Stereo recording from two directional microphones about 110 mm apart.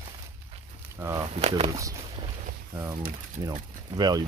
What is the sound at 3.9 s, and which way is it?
Speech, 40° right (ahead or behind).